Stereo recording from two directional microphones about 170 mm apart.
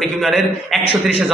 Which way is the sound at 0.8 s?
35° left (ahead or behind).